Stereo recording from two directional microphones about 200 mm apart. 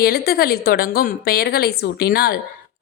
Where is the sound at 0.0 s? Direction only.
50° left (ahead or behind).